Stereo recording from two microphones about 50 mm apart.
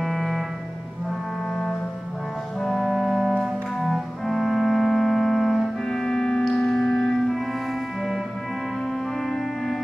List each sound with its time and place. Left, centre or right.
0.0 s music: centre
2.6 s music: centre
9.2 s music: centre